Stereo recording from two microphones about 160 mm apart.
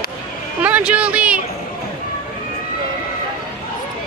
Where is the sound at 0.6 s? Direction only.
10° right (ahead or behind).